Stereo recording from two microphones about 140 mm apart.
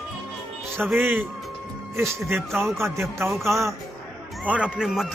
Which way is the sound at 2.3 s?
15° right (ahead or behind).